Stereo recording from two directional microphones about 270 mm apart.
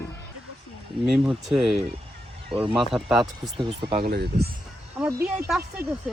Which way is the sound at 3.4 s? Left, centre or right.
Centre.